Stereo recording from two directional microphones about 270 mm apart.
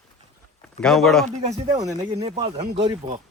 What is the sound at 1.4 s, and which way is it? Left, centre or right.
Speech, centre.